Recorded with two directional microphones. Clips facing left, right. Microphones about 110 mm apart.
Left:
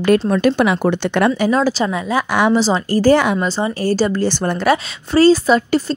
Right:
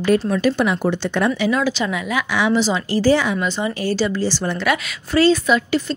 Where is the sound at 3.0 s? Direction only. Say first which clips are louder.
Left 4 dB; 55° left (ahead or behind).